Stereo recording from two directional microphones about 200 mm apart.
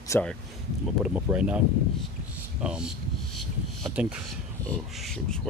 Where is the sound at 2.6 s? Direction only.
5° right (ahead or behind).